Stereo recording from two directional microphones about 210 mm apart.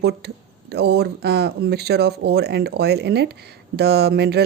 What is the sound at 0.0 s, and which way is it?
Speech, 50° right (ahead or behind).